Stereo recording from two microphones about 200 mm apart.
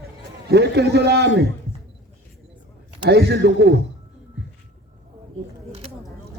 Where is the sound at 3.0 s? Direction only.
55° right (ahead or behind).